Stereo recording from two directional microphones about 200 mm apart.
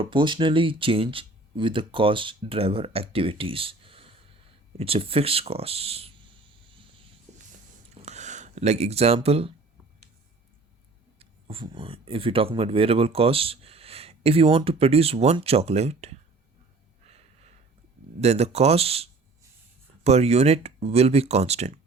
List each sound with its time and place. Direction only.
0.0 s speech: 25° right (ahead or behind)
8.0 s speech: 35° right (ahead or behind)
11.2 s speech: 25° right (ahead or behind)
18.2 s speech: 35° right (ahead or behind)
20.1 s speech: 30° right (ahead or behind)